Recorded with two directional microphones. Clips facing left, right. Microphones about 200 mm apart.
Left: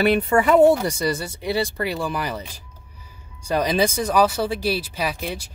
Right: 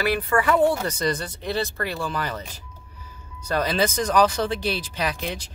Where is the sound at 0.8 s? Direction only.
10° left (ahead or behind).